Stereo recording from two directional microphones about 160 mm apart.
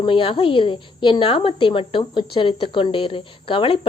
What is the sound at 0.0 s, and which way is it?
Speech, 35° left (ahead or behind).